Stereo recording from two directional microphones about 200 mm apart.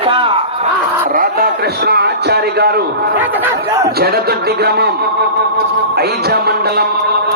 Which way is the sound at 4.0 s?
50° right (ahead or behind).